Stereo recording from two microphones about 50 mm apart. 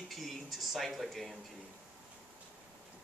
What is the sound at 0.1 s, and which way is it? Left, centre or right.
Speech, centre.